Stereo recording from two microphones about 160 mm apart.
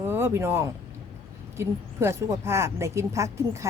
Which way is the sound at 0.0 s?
15° right (ahead or behind).